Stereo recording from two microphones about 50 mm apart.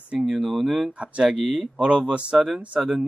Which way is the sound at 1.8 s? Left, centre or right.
Right.